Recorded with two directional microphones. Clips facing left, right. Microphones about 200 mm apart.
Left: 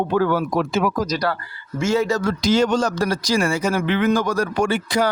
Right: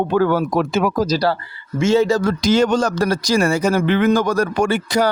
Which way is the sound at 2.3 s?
50° right (ahead or behind).